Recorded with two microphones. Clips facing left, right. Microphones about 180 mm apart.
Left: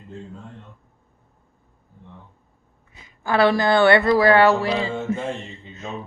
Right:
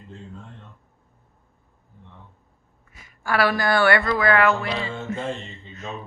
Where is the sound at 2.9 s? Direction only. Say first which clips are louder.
Left 3 dB; 20° left (ahead or behind).